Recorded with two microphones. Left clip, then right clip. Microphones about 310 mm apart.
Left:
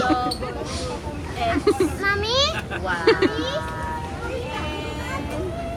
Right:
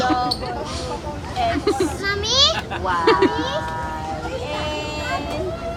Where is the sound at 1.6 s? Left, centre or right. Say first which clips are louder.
Even; centre.